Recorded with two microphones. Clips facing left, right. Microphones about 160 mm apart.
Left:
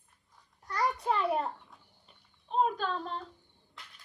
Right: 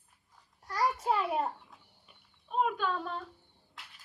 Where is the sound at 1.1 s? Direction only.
5° right (ahead or behind).